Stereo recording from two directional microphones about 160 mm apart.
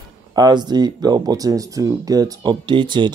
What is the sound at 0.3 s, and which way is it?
Speech, 25° right (ahead or behind).